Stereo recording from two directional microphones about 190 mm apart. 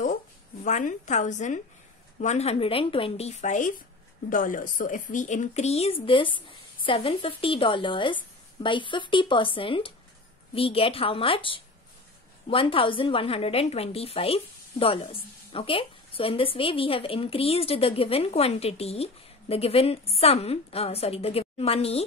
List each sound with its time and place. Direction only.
0.7 s a woman's voice: 40° left (ahead or behind)